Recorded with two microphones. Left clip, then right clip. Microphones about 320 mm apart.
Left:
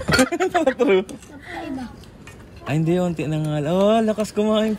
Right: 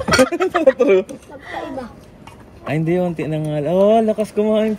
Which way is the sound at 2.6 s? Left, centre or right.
Centre.